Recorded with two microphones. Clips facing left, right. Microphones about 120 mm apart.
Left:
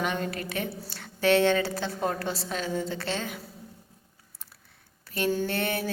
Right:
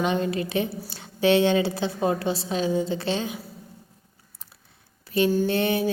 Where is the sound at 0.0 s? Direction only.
20° right (ahead or behind).